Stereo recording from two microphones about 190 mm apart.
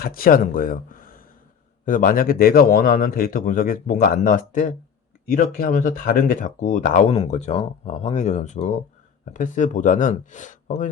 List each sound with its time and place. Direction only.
0.0 s a man's voice: 50° left (ahead or behind)